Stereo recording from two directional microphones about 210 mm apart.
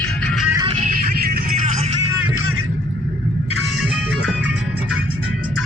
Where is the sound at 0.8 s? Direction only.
40° right (ahead or behind).